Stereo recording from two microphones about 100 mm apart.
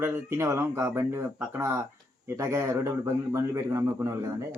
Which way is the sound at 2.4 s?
30° right (ahead or behind).